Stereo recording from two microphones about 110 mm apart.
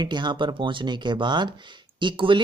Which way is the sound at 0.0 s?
45° right (ahead or behind).